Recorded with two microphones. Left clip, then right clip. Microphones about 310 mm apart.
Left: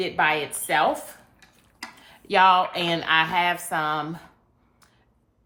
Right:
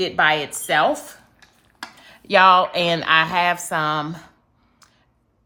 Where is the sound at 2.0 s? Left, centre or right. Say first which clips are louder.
Right 4 dB; right.